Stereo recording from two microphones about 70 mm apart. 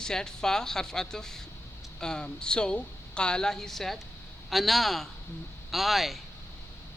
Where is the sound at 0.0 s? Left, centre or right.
Centre.